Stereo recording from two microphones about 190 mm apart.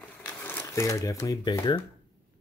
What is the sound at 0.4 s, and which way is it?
Speech, 10° left (ahead or behind).